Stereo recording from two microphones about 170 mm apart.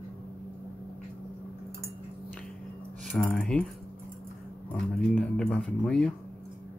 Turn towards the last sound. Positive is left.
turn(degrees=5)  # may be behind; listen again after turning